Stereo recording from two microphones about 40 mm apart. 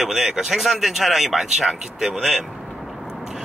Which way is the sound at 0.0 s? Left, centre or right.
Centre.